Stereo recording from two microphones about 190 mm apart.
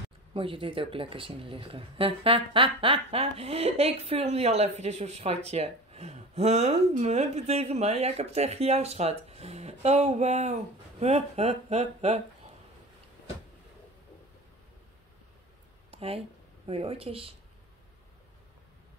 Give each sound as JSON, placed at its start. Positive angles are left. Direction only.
{"t": 0.3, "sound": "speech", "side_deg": -30}
{"t": 15.9, "sound": "speech", "side_deg": -30}